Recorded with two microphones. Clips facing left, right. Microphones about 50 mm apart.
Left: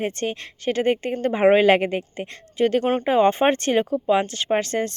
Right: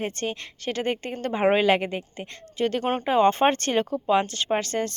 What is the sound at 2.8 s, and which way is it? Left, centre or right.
Speech, centre.